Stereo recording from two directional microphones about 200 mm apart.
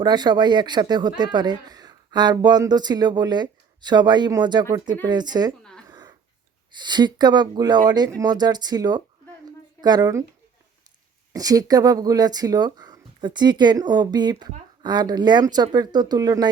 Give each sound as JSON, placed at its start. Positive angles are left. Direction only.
{"t": 0.0, "sound": "speech", "side_deg": -20}
{"t": 5.9, "sound": "a sound", "side_deg": -20}
{"t": 6.7, "sound": "speech", "side_deg": -20}
{"t": 11.3, "sound": "speech", "side_deg": -15}